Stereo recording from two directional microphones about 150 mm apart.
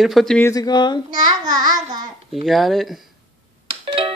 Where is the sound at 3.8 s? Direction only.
35° right (ahead or behind).